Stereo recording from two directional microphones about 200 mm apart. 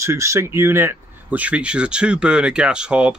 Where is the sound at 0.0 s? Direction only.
15° right (ahead or behind).